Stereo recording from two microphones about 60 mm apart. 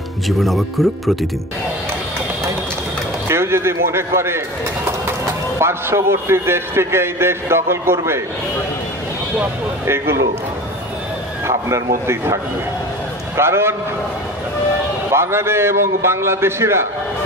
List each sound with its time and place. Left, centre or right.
0.4 s speech: centre
3.3 s speech: right
9.8 s speech: right
11.4 s speech: right
13.4 s speech: right
15.0 s speech: right